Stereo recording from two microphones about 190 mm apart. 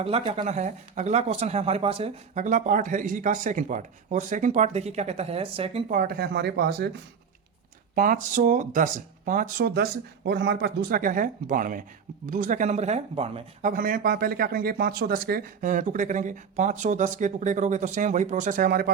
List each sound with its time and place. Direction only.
0.3 s speech: 35° right (ahead or behind)
5.9 s speech: 50° right (ahead or behind)
7.9 s speech: 45° right (ahead or behind)